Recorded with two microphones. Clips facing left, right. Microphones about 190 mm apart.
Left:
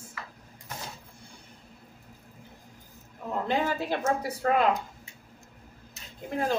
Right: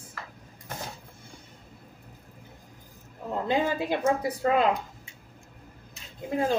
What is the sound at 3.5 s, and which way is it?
Speech, 15° right (ahead or behind).